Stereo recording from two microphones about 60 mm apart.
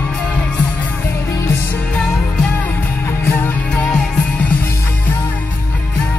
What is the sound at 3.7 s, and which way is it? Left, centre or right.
Music, centre.